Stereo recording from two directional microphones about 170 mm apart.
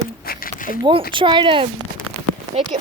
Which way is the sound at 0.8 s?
30° right (ahead or behind).